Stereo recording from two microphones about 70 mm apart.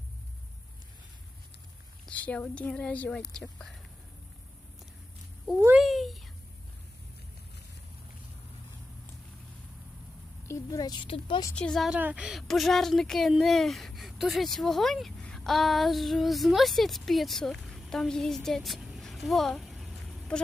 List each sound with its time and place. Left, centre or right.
2.0 s a woman's voice: left
5.8 s a sound: centre
10.4 s a woman's voice: left
11.5 s a woman's voice: centre
11.9 s speech: right
12.4 s speech: centre
19.0 s a sound: centre